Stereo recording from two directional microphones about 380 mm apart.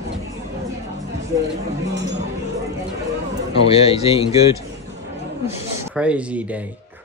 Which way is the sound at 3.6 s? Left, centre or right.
Centre.